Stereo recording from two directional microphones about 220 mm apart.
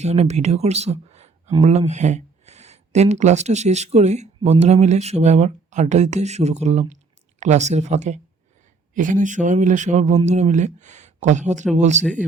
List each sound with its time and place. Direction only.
0.0 s speech: 30° right (ahead or behind)